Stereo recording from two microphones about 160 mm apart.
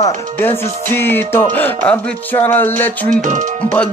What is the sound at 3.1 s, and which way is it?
Speech, 55° right (ahead or behind).